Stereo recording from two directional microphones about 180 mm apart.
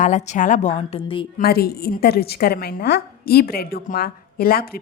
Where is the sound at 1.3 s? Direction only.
60° left (ahead or behind).